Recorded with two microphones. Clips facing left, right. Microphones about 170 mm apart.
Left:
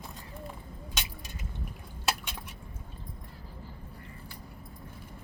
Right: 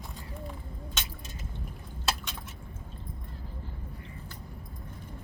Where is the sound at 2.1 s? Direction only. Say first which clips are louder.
Left 1 dB; 10° left (ahead or behind).